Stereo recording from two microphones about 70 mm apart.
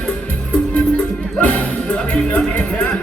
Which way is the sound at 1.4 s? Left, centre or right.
Left.